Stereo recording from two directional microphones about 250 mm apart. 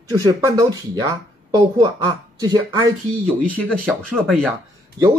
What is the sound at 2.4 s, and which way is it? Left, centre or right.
Speech, centre.